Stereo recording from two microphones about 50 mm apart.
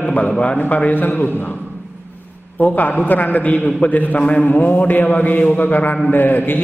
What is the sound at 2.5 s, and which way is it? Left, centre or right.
A man's voice, left.